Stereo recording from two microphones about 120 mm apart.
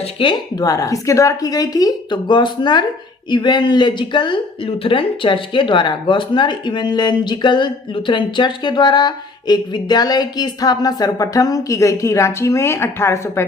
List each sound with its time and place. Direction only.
0.0 s speech: 45° left (ahead or behind); by 13.4 s 20° left (ahead or behind)